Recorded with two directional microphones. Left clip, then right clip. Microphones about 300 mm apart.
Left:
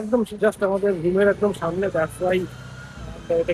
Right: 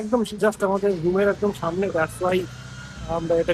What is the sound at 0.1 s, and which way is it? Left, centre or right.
Speech, centre.